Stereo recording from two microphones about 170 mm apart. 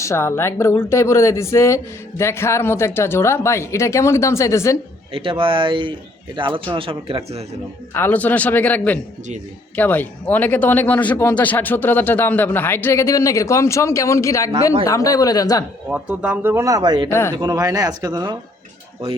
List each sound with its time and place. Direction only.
0.0 s speech: 15° left (ahead or behind)
5.1 s speech: 30° right (ahead or behind)
7.9 s speech: 10° left (ahead or behind)
15.9 s speech: 10° right (ahead or behind); by 17.1 s 25° right (ahead or behind)
17.1 s speech: 15° left (ahead or behind)
17.3 s speech: 20° right (ahead or behind)